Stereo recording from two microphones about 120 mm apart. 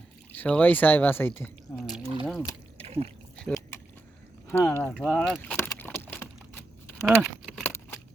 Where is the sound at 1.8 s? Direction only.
Centre (ahead or behind).